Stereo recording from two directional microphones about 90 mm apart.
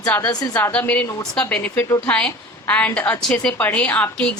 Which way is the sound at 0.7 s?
15° left (ahead or behind).